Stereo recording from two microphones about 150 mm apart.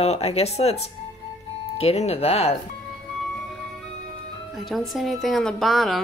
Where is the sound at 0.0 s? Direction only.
45° left (ahead or behind).